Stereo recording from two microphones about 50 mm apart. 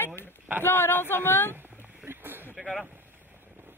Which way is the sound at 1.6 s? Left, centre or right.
Right.